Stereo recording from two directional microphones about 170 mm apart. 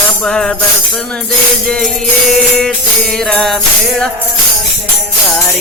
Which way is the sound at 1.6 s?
5° left (ahead or behind).